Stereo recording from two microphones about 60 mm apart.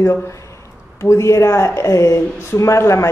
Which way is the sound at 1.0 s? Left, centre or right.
Left.